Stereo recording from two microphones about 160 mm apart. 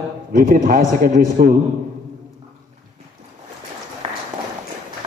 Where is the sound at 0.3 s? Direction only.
60° right (ahead or behind).